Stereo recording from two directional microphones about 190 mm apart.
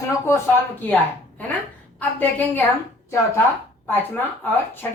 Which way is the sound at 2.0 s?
10° left (ahead or behind).